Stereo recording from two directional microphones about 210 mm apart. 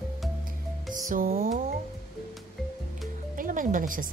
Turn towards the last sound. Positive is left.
turn(degrees=-40)  # may be behind; listen again after turning